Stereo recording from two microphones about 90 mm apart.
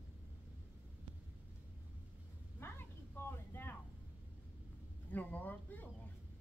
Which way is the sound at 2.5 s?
25° left (ahead or behind).